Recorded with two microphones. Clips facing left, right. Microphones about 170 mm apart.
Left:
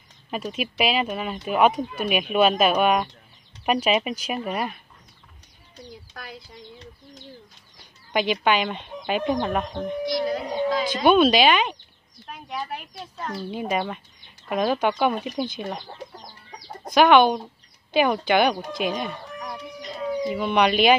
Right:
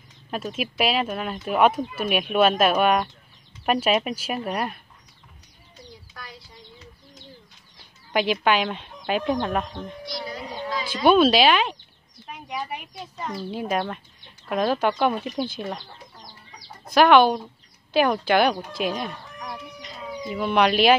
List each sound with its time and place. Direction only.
0.3 s speech: centre (ahead or behind)
8.1 s speech: centre (ahead or behind)
10.0 s a woman's voice: 50° left (ahead or behind)
10.7 s a sound: 50° left (ahead or behind)
11.1 s speech: centre (ahead or behind)
16.9 s speech: centre (ahead or behind)